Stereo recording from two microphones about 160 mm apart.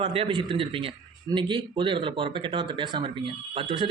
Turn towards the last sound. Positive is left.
turn(degrees=-35)  # may be behind; listen again after turning